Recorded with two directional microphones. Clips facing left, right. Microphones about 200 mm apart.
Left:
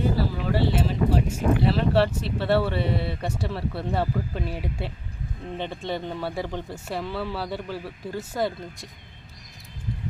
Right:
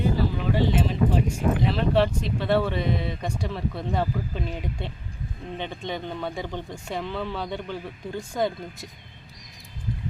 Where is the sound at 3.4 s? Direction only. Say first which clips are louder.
Even; 10° left (ahead or behind).